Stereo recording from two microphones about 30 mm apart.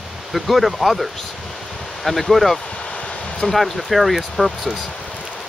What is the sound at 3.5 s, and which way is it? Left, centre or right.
Speech, centre.